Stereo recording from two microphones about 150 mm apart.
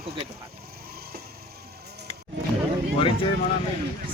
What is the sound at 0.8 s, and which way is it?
Vehicle, 90° right.